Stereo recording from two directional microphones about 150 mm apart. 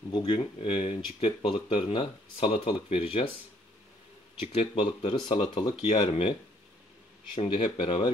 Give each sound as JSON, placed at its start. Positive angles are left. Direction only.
{"t": 0.1, "sound": "speech", "side_deg": 30}
{"t": 4.4, "sound": "speech", "side_deg": 35}
{"t": 7.3, "sound": "speech", "side_deg": 35}